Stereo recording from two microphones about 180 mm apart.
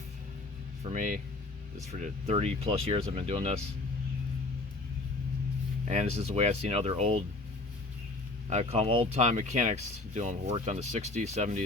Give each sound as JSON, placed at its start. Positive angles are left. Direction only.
{"t": 0.9, "sound": "speech", "side_deg": -45}
{"t": 5.9, "sound": "speech", "side_deg": -35}
{"t": 8.4, "sound": "speech", "side_deg": -35}